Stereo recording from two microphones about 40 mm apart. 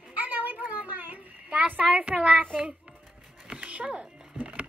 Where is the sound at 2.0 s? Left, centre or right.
Right.